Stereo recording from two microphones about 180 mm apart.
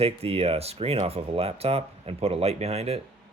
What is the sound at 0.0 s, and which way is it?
Speech, 35° right (ahead or behind).